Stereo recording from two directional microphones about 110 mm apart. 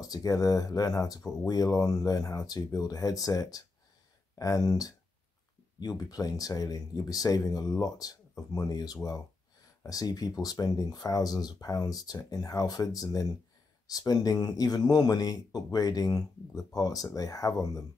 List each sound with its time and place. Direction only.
0.0 s speech: 35° left (ahead or behind)